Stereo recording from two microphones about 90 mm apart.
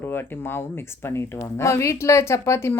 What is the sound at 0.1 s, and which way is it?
Speech, 25° left (ahead or behind).